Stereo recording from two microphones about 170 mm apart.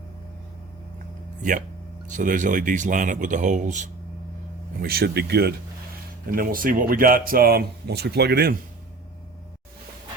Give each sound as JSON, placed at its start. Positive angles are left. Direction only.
{"t": 1.4, "sound": "speech", "side_deg": -50}
{"t": 4.8, "sound": "speech", "side_deg": -65}
{"t": 6.2, "sound": "speech", "side_deg": -55}